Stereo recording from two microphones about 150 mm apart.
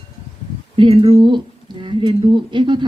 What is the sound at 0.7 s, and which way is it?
Speech, 35° right (ahead or behind).